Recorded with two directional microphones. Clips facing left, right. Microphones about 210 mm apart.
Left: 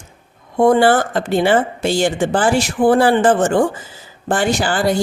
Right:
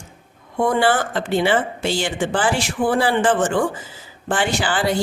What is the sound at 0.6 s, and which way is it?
Speech, 40° left (ahead or behind).